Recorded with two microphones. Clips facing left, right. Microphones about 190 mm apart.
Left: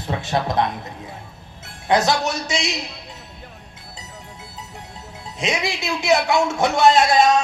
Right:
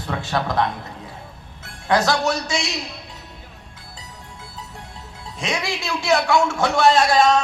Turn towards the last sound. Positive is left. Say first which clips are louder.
# left 1 dB
turn(degrees=20)  # may be behind; listen again after turning